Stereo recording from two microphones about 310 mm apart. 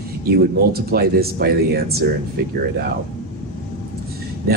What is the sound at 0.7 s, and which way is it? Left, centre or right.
Speech, right.